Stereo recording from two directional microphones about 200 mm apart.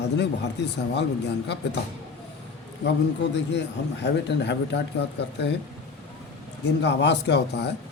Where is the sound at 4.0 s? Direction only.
60° left (ahead or behind).